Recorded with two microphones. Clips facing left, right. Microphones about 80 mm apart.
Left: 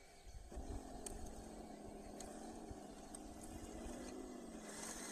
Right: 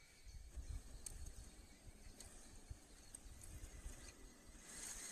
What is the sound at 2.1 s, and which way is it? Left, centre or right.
Vehicle, left.